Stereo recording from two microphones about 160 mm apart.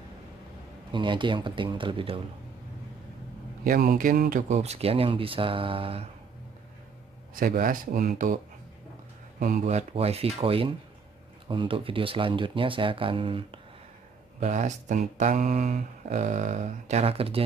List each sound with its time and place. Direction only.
0.9 s speech: 30° right (ahead or behind)
3.6 s speech: 65° right (ahead or behind); by 6.0 s 35° right (ahead or behind)
7.3 s speech: 60° right (ahead or behind)
9.4 s speech: 55° right (ahead or behind); by 13.6 s 35° right (ahead or behind)
14.4 s speech: 50° right (ahead or behind)